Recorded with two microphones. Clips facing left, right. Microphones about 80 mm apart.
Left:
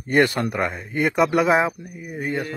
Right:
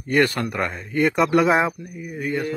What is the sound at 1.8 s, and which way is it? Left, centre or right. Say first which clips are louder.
Speech: right 1 dB; left.